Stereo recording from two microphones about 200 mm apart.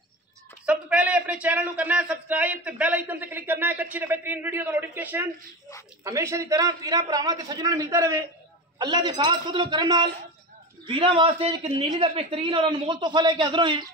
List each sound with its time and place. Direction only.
0.7 s a man's voice: 5° right (ahead or behind); by 13.8 s 25° right (ahead or behind)